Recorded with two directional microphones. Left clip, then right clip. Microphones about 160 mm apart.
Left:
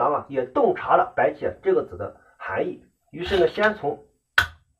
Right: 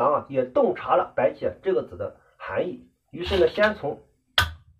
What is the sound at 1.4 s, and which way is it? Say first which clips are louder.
Speech: left 2 dB; 20° left (ahead or behind).